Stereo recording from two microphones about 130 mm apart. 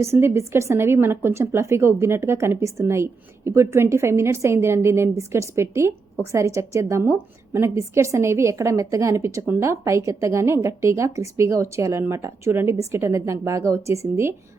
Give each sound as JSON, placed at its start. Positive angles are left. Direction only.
{"t": 0.0, "sound": "a woman's voice", "side_deg": -20}